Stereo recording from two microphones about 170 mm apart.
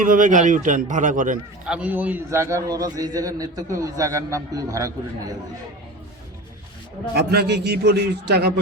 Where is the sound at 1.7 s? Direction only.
10° right (ahead or behind).